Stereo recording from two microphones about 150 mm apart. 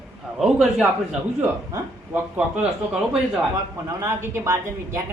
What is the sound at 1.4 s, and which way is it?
Speech, 15° right (ahead or behind).